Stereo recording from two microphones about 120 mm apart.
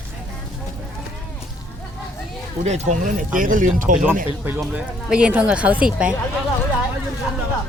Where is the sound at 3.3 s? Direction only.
90° right.